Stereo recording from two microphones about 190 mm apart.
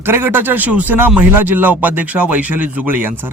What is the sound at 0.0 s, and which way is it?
A man's voice, 10° right (ahead or behind).